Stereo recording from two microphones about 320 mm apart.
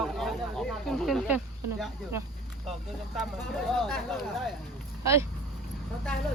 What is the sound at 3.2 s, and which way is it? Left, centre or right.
Speech, centre.